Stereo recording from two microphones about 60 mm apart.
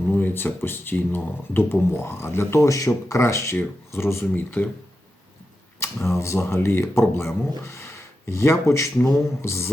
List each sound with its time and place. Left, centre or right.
0.1 s speech: left
2.6 s speech: left
4.4 s speech: left
6.1 s speech: left